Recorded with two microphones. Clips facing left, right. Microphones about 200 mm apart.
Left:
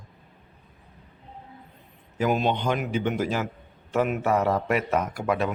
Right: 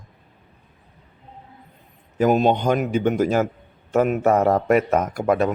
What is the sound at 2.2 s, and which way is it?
A man's voice, 45° right (ahead or behind).